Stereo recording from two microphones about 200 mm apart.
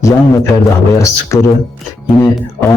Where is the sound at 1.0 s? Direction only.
15° left (ahead or behind).